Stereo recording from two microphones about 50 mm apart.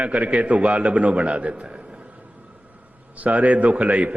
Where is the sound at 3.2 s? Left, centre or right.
Right.